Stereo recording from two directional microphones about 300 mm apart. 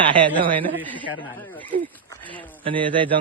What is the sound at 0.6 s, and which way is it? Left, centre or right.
Speech, centre.